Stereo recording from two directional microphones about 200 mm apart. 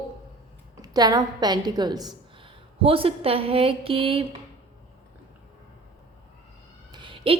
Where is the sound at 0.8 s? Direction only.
20° right (ahead or behind).